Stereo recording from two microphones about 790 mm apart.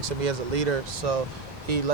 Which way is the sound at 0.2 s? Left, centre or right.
Right.